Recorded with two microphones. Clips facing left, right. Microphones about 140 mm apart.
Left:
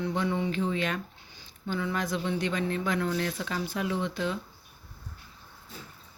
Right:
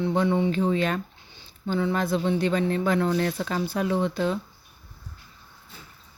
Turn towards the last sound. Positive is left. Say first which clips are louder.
# right 6 dB
turn(degrees=-40)  # may be behind; listen again after turning